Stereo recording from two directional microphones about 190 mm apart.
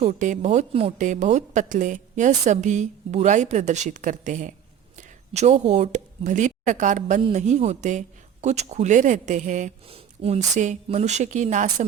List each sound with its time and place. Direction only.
0.0 s speech: 40° right (ahead or behind)